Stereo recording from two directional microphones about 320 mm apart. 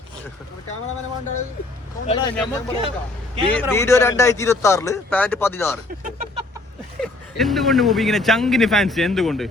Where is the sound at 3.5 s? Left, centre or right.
Centre.